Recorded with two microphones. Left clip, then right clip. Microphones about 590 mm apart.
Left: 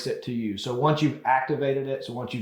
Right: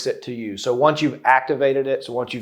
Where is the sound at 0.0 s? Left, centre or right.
Right.